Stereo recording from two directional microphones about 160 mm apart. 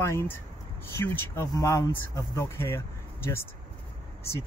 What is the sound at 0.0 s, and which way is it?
Speech, 15° left (ahead or behind).